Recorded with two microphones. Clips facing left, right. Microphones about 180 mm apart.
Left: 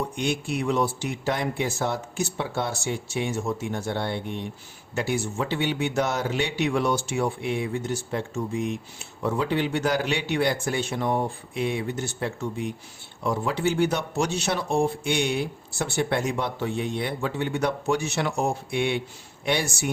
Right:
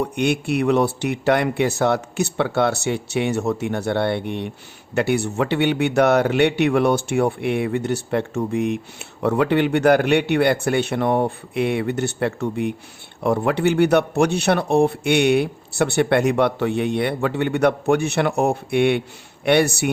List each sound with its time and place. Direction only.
0.0 s a man's voice: 65° right (ahead or behind)